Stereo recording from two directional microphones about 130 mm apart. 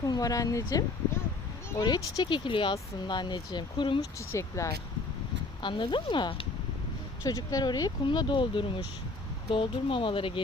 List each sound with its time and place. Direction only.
0.0 s speech: 30° left (ahead or behind)
4.3 s speech: 25° left (ahead or behind)
5.6 s speech: 40° left (ahead or behind)